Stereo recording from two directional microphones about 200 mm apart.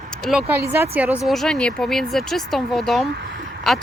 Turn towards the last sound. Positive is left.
turn(degrees=0)  # may be behind; listen again after turning